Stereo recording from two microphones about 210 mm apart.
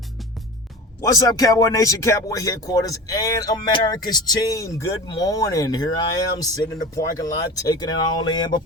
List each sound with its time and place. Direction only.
1.0 s speech: 15° left (ahead or behind)